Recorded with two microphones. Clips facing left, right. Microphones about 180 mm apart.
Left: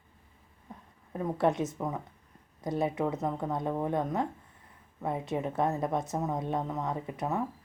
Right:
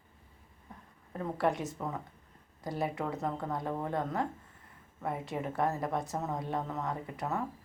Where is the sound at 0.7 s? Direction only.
20° left (ahead or behind).